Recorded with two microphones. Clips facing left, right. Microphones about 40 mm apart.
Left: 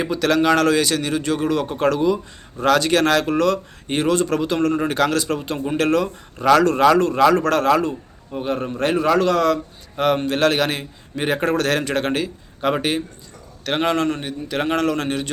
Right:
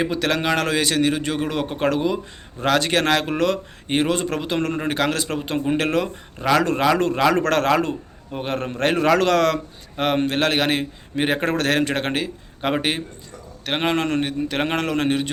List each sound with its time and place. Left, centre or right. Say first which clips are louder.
0.0 s a man's voice: left 3 dB; right
7.3 s a man's voice: right 1 dB; right
10.0 s a man's voice: left 2 dB; right
14.1 s a man's voice: right 2 dB; right